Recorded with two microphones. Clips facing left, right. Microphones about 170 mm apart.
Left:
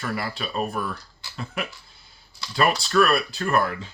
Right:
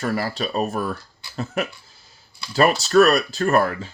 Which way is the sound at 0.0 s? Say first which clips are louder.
Right 5 dB; 40° right (ahead or behind).